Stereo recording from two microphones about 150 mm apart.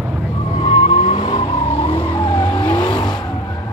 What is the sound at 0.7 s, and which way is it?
Vehicle, 40° left (ahead or behind).